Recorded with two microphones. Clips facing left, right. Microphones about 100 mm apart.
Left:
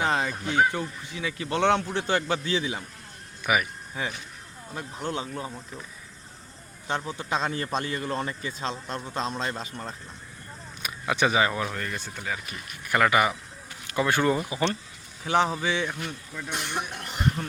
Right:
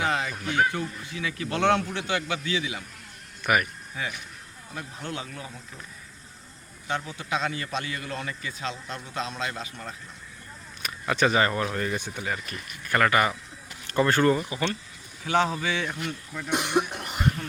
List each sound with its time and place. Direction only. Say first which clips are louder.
0.0 s a sound: left 1 dB; 30° left (ahead or behind)
0.7 s speech: even; 25° left (ahead or behind)
2.0 s a man's voice: left 3 dB; 35° left (ahead or behind)
3.4 s speech: right 1 dB; 5° left (ahead or behind)
3.9 s speech: left 1 dB; 30° left (ahead or behind)
6.8 s a man's voice: left 1 dB; 30° left (ahead or behind)
10.8 s speech: right 1 dB; 10° left (ahead or behind); by 12.2 s 15° right (ahead or behind)
12.2 s speech: right 1 dB; centre (ahead or behind)
12.8 s speech: even; 10° left (ahead or behind)
14.3 s speech: left 2 dB; 20° left (ahead or behind)
16.3 s speech: right 8 dB; 5° right (ahead or behind)